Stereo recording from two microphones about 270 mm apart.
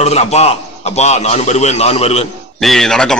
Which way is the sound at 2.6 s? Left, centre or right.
Centre.